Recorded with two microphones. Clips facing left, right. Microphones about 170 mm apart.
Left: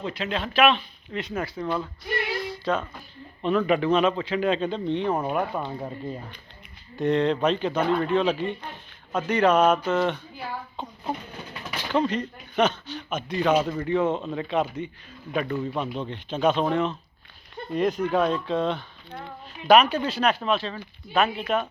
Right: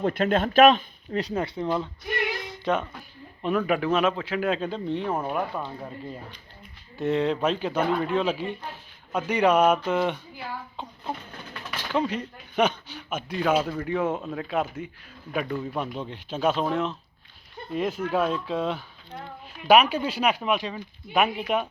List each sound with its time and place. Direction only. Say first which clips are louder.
0.0 s speech: right 6 dB; 50° right (ahead or behind); by 2.8 s 20° right (ahead or behind)
3.4 s speech: left 2 dB; 10° right (ahead or behind)
5.2 s speech: left 2 dB; 10° left (ahead or behind)
6.9 s speech: left 2 dB; 5° right (ahead or behind)
11.9 s speech: left 2 dB; 5° right (ahead or behind)